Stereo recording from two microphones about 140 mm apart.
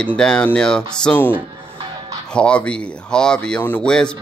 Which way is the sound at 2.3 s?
5° left (ahead or behind).